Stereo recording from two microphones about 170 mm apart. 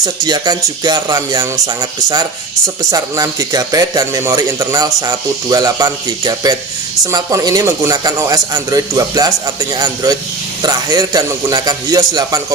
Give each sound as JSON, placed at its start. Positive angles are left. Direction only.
{"t": 0.0, "sound": "speech", "side_deg": -25}